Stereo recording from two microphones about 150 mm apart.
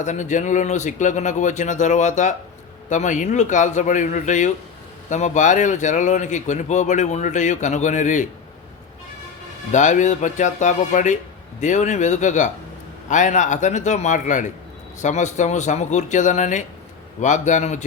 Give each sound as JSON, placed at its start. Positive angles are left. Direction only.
{"t": 0.0, "sound": "speech", "side_deg": 55}
{"t": 9.7, "sound": "speech", "side_deg": 55}